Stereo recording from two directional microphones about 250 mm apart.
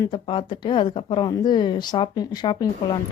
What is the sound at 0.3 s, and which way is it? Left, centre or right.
Speech, centre.